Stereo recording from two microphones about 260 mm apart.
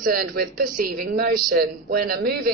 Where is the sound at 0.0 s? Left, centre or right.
Right.